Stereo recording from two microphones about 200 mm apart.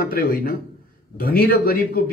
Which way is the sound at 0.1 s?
45° left (ahead or behind).